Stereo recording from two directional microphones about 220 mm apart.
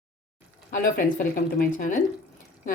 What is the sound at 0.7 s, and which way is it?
Speech, 40° left (ahead or behind).